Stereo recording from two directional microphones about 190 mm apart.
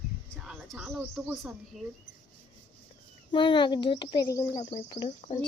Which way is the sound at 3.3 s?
25° left (ahead or behind).